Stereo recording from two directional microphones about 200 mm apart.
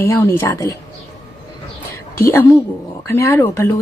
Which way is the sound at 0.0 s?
10° left (ahead or behind).